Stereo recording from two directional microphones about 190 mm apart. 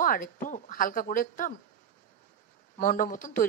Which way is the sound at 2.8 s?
45° left (ahead or behind).